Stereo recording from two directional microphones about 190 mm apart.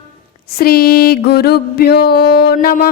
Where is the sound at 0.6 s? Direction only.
55° left (ahead or behind).